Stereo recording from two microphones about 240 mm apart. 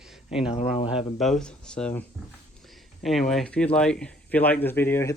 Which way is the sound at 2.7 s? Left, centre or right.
Centre.